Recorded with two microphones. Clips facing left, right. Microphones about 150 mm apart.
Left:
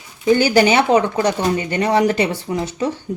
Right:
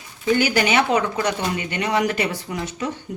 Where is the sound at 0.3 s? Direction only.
30° left (ahead or behind).